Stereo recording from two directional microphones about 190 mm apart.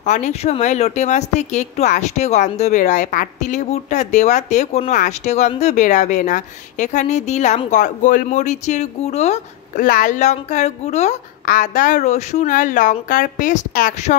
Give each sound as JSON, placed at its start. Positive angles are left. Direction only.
{"t": 0.0, "sound": "speech", "side_deg": 40}